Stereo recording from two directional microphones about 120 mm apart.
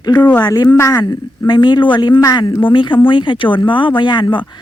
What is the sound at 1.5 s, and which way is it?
A woman's voice, 40° left (ahead or behind).